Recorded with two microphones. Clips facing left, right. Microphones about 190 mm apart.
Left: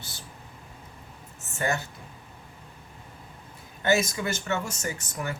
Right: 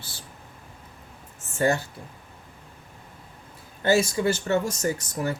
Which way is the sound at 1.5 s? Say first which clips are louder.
Right 6 dB; 35° right (ahead or behind).